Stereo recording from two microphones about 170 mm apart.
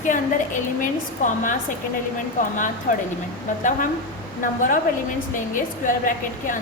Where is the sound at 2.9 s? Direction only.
50° left (ahead or behind).